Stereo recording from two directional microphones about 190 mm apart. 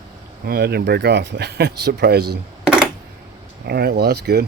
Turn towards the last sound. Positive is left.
turn(degrees=-55)  # may be behind; listen again after turning